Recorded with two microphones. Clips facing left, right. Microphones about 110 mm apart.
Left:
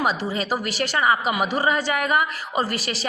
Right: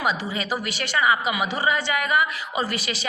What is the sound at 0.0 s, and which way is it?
A woman's voice, 40° left (ahead or behind).